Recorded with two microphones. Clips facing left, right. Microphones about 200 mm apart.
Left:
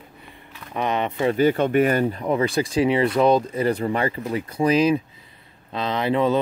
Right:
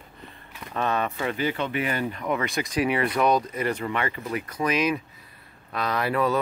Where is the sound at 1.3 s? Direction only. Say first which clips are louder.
Left 9 dB; 45° left (ahead or behind).